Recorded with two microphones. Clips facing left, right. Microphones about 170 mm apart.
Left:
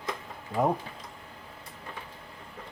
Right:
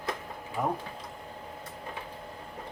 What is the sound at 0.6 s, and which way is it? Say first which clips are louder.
Speech: left 5 dB; 20° left (ahead or behind).